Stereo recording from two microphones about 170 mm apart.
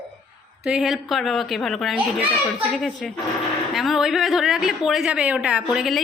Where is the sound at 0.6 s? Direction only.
5° right (ahead or behind).